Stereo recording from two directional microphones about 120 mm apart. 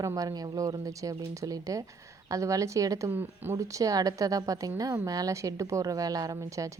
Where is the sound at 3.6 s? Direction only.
30° right (ahead or behind).